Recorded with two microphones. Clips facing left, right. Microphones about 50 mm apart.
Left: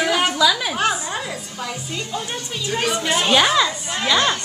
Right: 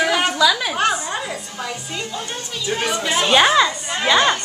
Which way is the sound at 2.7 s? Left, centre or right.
Right.